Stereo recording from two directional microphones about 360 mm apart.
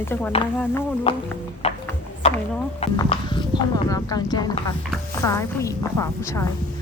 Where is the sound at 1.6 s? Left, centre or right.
Centre.